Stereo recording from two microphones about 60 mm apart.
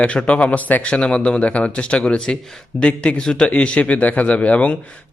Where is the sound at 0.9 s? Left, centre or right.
Centre.